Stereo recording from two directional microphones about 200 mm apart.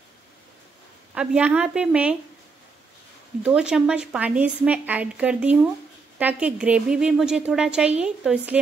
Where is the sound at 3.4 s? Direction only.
5° right (ahead or behind).